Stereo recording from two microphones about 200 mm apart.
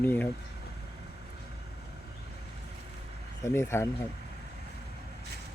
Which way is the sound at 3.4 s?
15° left (ahead or behind).